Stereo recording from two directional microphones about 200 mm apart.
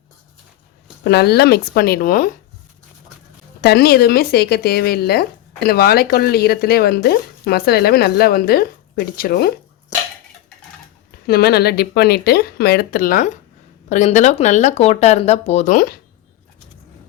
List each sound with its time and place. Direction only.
1.0 s speech: 55° left (ahead or behind)
3.6 s speech: 55° left (ahead or behind)
11.3 s speech: 50° left (ahead or behind)